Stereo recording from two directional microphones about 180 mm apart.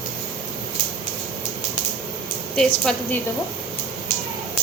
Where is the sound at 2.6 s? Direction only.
5° left (ahead or behind).